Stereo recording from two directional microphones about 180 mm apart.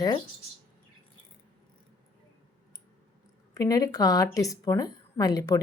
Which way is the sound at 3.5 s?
20° left (ahead or behind).